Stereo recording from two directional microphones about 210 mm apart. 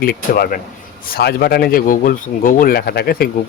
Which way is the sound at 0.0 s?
45° left (ahead or behind).